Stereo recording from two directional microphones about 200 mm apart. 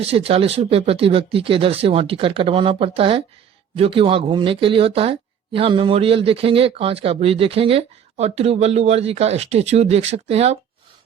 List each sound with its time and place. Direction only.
0.0 s speech: 30° right (ahead or behind)